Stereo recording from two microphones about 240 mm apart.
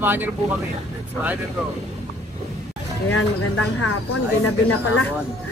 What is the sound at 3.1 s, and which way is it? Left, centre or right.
Speech, left.